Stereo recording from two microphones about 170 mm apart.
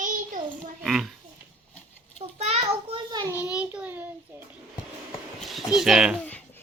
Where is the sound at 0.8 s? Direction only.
Centre (ahead or behind).